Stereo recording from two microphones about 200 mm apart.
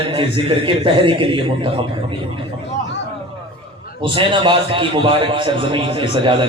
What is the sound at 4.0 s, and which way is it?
A man's voice, 25° right (ahead or behind).